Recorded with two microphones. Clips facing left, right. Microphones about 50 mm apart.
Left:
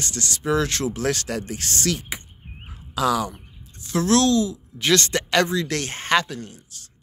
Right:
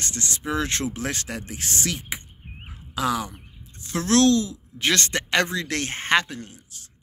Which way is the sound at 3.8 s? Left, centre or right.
Right.